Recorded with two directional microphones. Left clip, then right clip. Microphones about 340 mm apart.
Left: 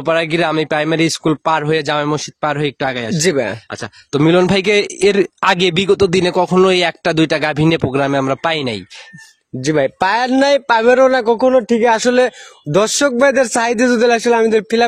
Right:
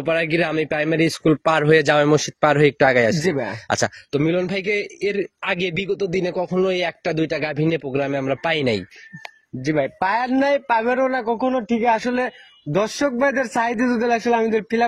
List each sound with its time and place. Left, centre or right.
0.0 s speech: centre
2.9 s a man's voice: centre
3.3 s speech: left
3.6 s speech: right
4.2 s speech: left
9.6 s speech: left